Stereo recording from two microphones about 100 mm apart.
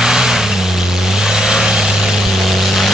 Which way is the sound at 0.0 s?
5° right (ahead or behind).